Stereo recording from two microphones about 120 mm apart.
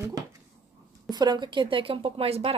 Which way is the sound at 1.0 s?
35° right (ahead or behind).